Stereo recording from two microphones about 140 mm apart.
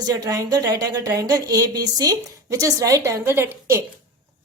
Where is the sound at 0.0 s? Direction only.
25° right (ahead or behind).